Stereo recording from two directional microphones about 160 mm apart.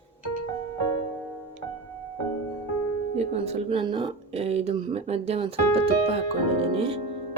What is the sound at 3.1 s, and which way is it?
Speech, 45° right (ahead or behind).